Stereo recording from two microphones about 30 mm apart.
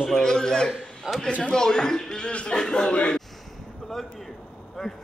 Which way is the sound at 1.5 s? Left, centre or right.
Left.